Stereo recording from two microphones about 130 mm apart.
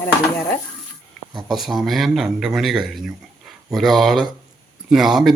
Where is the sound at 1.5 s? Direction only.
Centre (ahead or behind).